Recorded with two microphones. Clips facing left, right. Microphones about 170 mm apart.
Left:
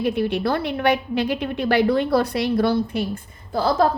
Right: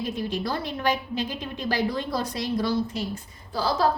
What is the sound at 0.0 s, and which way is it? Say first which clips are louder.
A woman's voice: left 7 dB; 65° left (ahead or behind).